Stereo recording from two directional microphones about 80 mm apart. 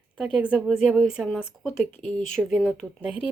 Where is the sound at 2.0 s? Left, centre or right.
Centre.